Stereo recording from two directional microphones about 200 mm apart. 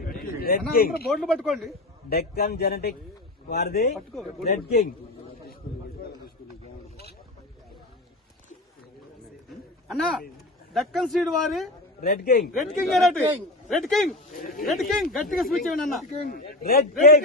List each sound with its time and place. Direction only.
0.0 s a sound: 50° left (ahead or behind)
0.7 s a man's voice: 50° left (ahead or behind)
1.0 s a man's voice: centre (ahead or behind)
2.0 s a man's voice: 50° left (ahead or behind)
3.9 s a man's voice: centre (ahead or behind)
4.4 s a man's voice: 50° left (ahead or behind)
9.9 s a man's voice: centre (ahead or behind)
11.9 s a man's voice: 50° left (ahead or behind)
12.5 s a man's voice: centre (ahead or behind)
14.3 s a man's voice: 45° left (ahead or behind)
14.7 s a man's voice: centre (ahead or behind)
16.3 s a man's voice: 50° left (ahead or behind)